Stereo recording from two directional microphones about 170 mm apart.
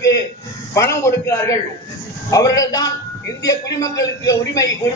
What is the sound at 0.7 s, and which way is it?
A man's voice, 15° left (ahead or behind).